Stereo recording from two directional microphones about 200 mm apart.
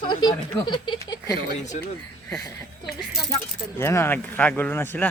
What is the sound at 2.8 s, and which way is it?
Speech, centre (ahead or behind).